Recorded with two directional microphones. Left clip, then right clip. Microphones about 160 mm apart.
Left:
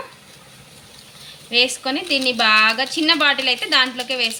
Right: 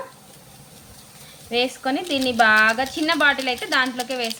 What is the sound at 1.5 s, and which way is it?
A woman's voice, 35° right (ahead or behind).